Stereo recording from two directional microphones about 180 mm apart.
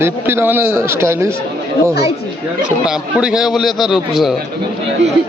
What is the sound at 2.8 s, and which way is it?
A man's voice, 5° right (ahead or behind).